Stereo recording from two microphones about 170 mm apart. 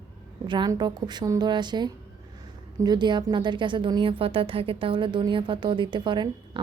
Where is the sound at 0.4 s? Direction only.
25° right (ahead or behind).